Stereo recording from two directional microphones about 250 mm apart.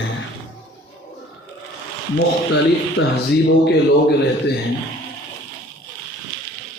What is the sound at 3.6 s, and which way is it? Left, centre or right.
Speech, left.